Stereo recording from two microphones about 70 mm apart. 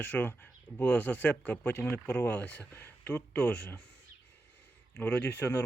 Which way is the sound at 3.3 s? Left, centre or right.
Centre.